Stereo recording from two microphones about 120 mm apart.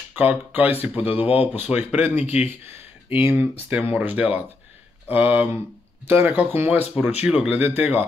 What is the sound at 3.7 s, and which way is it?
Speech, 10° right (ahead or behind).